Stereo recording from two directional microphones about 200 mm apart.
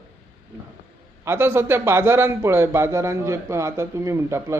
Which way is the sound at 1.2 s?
10° right (ahead or behind).